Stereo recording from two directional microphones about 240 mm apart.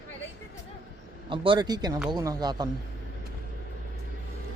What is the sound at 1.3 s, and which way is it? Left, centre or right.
Speech, right.